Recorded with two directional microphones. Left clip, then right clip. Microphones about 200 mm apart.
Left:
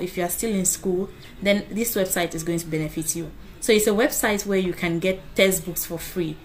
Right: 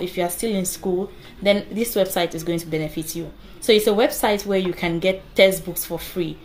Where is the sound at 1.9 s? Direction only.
15° left (ahead or behind).